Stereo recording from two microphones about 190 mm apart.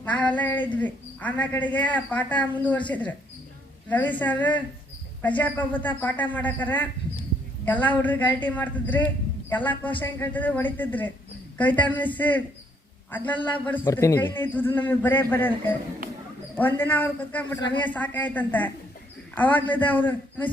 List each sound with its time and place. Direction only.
0.0 s a woman's voice: 5° left (ahead or behind)
17.6 s speech: 25° left (ahead or behind)
17.8 s a woman's voice: 10° left (ahead or behind)